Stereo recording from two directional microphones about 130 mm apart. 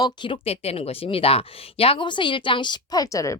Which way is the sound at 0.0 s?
40° left (ahead or behind).